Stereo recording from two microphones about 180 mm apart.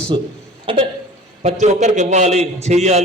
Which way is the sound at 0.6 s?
30° right (ahead or behind).